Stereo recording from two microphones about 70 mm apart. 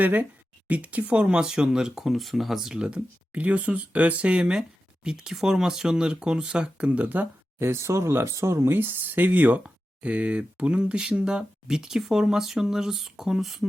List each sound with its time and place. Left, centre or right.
0.0 s speech: right; by 3.0 s centre
3.3 s speech: right
7.7 s speech: right; by 13.7 s centre